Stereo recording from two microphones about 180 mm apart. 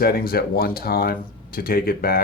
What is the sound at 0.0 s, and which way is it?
Speech, 55° left (ahead or behind).